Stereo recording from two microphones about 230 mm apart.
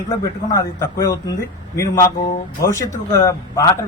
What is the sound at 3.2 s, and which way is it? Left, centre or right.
Speech, centre.